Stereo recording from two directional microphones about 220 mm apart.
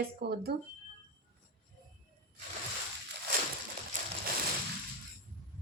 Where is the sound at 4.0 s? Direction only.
35° right (ahead or behind).